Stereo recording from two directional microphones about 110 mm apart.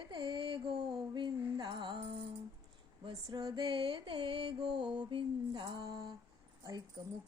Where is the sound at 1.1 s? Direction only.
45° right (ahead or behind).